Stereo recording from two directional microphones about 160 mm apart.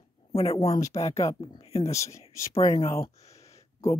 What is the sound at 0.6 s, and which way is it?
Speech, 20° left (ahead or behind).